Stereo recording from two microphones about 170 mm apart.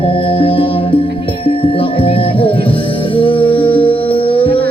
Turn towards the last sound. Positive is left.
turn(degrees=30)  # may be behind; listen again after turning